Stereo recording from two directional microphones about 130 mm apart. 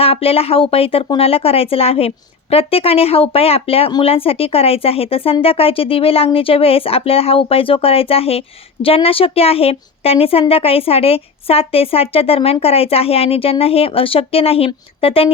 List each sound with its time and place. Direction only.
0.0 s a woman's voice: 50° left (ahead or behind)